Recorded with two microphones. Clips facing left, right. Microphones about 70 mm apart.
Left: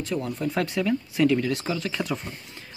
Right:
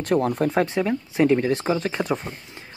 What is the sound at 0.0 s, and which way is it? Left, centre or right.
Speech, right.